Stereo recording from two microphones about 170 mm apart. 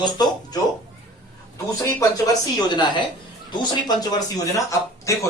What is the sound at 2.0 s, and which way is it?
Speech, 25° left (ahead or behind).